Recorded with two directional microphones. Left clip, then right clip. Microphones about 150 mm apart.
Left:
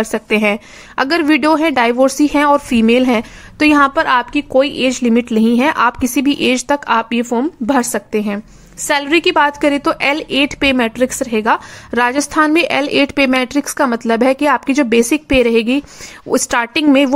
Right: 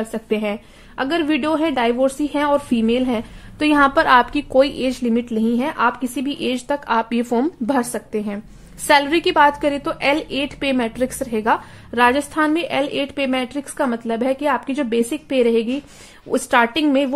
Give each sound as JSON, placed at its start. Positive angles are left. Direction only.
{"t": 0.0, "sound": "a woman's voice", "side_deg": 40}
{"t": 3.9, "sound": "a woman's voice", "side_deg": 15}
{"t": 6.9, "sound": "a woman's voice", "side_deg": 15}
{"t": 8.8, "sound": "a woman's voice", "side_deg": 15}